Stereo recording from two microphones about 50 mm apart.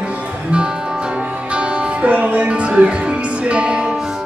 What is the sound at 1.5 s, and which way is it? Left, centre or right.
Speech, right.